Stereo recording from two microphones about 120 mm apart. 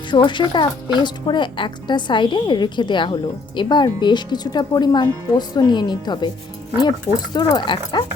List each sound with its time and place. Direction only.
0.1 s speech: 40° left (ahead or behind)